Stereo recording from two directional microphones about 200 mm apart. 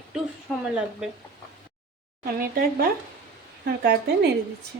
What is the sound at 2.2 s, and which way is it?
Speech, 50° right (ahead or behind).